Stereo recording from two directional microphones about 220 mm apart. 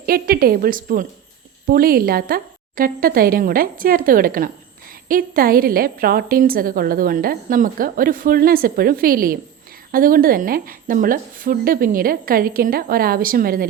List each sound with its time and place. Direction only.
0.0 s a woman's voice: 40° right (ahead or behind)